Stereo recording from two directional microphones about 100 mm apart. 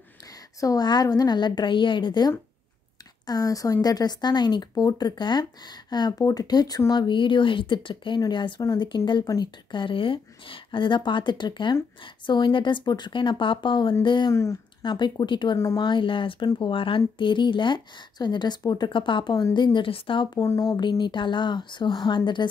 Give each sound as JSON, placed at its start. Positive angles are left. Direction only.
{"t": 0.6, "sound": "speech", "side_deg": 40}
{"t": 3.3, "sound": "a woman's voice", "side_deg": 35}
{"t": 14.3, "sound": "a woman's voice", "side_deg": 30}
{"t": 14.8, "sound": "speech", "side_deg": 50}
{"t": 16.4, "sound": "speech", "side_deg": 40}
{"t": 16.7, "sound": "speech", "side_deg": 60}
{"t": 20.3, "sound": "a woman's voice", "side_deg": 30}
{"t": 21.0, "sound": "speech", "side_deg": 50}